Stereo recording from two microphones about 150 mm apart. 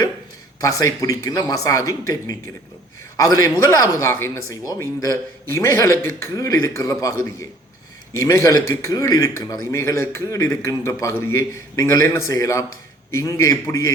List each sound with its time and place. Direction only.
0.6 s a man's voice: 20° left (ahead or behind)
8.2 s a man's voice: 20° left (ahead or behind)